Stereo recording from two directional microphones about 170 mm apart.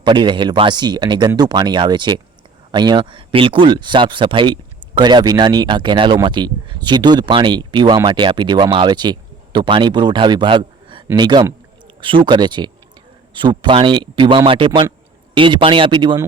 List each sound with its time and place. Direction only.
0.0 s speech: 25° right (ahead or behind)